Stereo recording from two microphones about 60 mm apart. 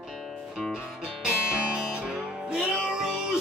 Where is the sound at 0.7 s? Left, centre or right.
Centre.